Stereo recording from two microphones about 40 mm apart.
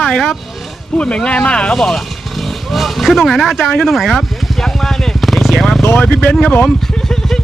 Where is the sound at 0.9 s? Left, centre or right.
Left.